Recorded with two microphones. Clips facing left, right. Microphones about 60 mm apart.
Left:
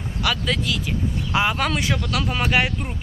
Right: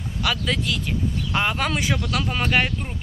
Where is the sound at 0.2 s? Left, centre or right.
Centre.